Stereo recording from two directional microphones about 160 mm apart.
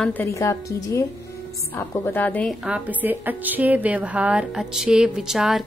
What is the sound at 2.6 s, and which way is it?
A woman's voice, 10° right (ahead or behind).